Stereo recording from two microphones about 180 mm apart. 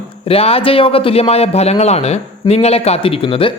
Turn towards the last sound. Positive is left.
turn(degrees=30)  # may be behind; listen again after turning